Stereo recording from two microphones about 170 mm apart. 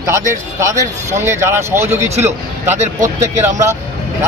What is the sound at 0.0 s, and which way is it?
A man's voice, 15° right (ahead or behind).